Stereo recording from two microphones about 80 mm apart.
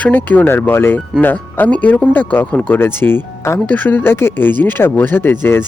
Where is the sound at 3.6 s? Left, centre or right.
Left.